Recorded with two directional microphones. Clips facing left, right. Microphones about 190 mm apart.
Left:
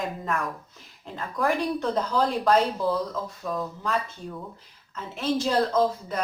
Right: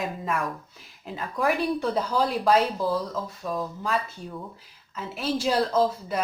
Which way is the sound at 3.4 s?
Centre (ahead or behind).